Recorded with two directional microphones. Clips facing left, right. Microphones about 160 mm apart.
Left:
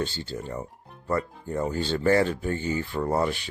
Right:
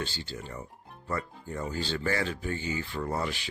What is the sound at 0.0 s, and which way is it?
Speech, 50° left (ahead or behind).